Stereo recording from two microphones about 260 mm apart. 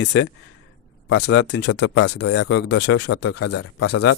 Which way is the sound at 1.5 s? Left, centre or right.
Left.